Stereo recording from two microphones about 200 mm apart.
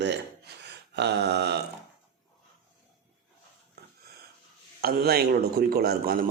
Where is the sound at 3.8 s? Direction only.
55° right (ahead or behind).